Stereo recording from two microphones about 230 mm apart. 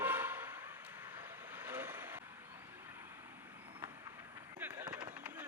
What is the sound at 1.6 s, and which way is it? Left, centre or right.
Vehicle, centre.